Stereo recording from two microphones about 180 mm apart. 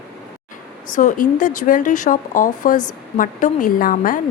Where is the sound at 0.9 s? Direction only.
45° left (ahead or behind).